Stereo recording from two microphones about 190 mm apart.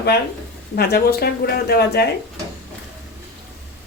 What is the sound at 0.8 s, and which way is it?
Speech, 55° left (ahead or behind).